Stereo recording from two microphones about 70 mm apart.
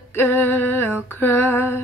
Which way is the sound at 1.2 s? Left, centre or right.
Left.